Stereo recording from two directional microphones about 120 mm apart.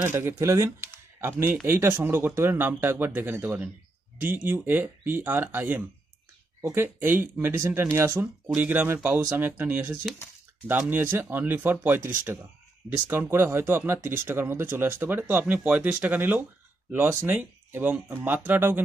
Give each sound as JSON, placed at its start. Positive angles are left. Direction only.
{"t": 0.0, "sound": "speech", "side_deg": -20}